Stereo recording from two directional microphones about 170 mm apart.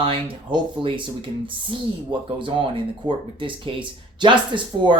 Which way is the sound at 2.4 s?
30° right (ahead or behind).